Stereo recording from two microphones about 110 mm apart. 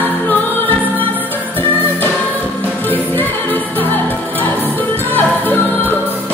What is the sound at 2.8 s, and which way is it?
Music, 15° left (ahead or behind).